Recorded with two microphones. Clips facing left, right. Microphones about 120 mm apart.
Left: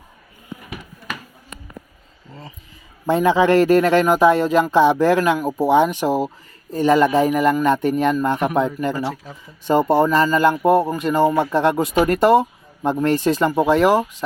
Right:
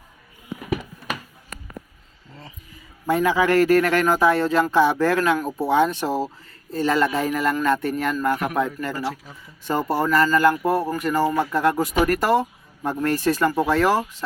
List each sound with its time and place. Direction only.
3.1 s a man's voice: 25° left (ahead or behind)